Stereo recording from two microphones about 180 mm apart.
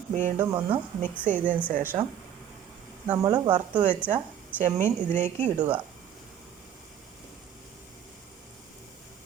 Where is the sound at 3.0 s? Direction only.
20° right (ahead or behind).